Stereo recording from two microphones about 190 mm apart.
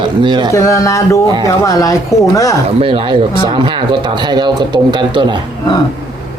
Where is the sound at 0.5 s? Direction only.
15° left (ahead or behind).